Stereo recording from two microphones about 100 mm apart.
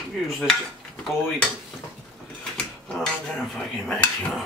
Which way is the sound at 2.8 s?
5° left (ahead or behind).